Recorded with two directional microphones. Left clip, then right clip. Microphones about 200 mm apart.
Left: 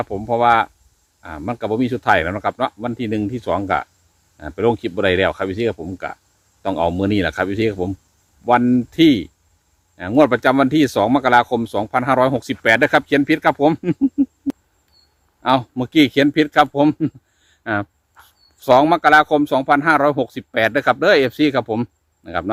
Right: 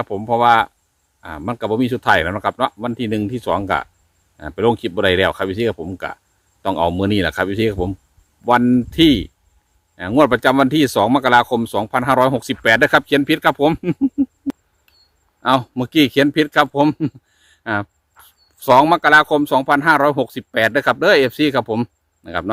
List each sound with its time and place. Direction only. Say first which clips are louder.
0.0 s a man's voice: right 1 dB; 30° right (ahead or behind)
15.4 s a man's voice: right 1 dB; 25° right (ahead or behind)